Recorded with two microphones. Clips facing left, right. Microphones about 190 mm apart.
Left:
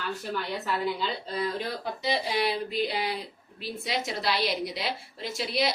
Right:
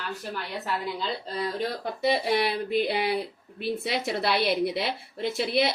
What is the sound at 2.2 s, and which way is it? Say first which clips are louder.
Speech: right 3 dB; 60° right (ahead or behind).